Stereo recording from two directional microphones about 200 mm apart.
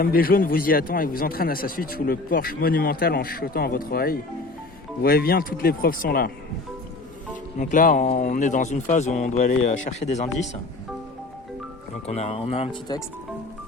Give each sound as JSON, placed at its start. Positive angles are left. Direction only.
{"t": 0.0, "sound": "a man's voice", "side_deg": 45}
{"t": 7.6, "sound": "speech", "side_deg": 40}
{"t": 12.0, "sound": "speech", "side_deg": 30}